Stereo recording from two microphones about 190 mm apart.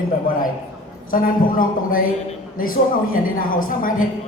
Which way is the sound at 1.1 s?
45° left (ahead or behind).